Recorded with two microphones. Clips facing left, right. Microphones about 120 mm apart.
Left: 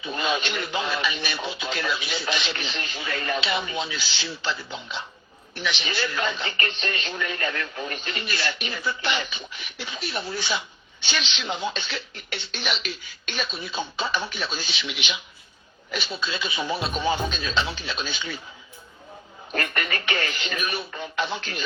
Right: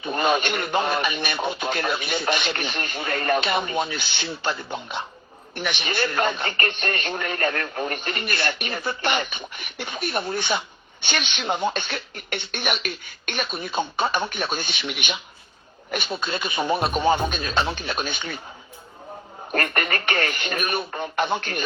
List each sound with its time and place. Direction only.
0.0 s speech: 55° right (ahead or behind)
19.5 s speech: 55° right (ahead or behind)